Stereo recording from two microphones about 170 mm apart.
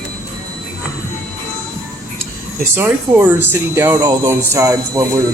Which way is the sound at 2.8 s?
10° right (ahead or behind).